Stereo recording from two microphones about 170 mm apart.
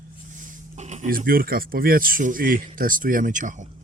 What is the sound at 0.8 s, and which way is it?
Speech, 40° right (ahead or behind).